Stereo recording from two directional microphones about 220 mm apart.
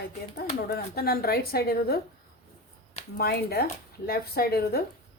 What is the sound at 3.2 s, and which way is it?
A woman's voice, 45° left (ahead or behind).